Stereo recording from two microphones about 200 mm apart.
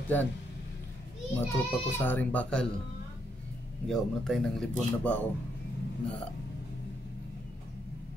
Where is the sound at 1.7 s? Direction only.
10° left (ahead or behind).